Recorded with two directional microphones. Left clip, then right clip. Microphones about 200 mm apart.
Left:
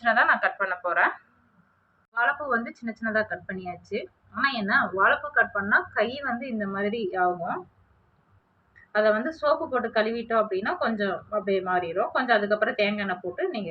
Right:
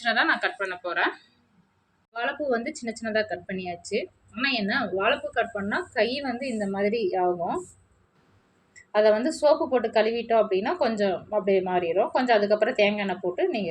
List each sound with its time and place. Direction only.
0.0 s a woman's voice: 45° right (ahead or behind)
2.1 s a woman's voice: 20° right (ahead or behind)
8.9 s a woman's voice: 20° right (ahead or behind)